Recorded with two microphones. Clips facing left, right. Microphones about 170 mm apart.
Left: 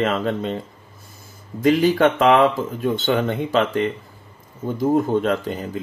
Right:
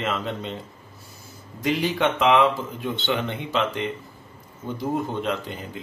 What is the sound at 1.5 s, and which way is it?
Speech, 45° left (ahead or behind).